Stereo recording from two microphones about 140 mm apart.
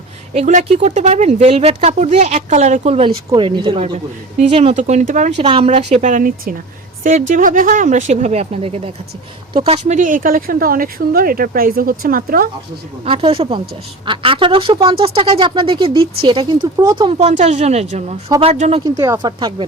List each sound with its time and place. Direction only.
0.3 s speech: 55° right (ahead or behind)
3.3 s speech: 35° right (ahead or behind)
4.4 s speech: 50° right (ahead or behind)
4.8 s speech: 60° right (ahead or behind)
5.4 s speech: 45° right (ahead or behind)
6.1 s speech: 75° right (ahead or behind)
7.0 s speech: 65° right (ahead or behind); by 12.5 s 90° right
13.1 s speech: 45° right (ahead or behind); by 17.1 s 25° right (ahead or behind)
17.1 s speech: 50° right (ahead or behind)
18.3 s speech: 25° right (ahead or behind)
19.4 s speech: 35° right (ahead or behind)